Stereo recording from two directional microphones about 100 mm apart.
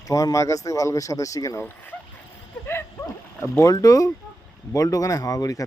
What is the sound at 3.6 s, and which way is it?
Speech, 35° left (ahead or behind).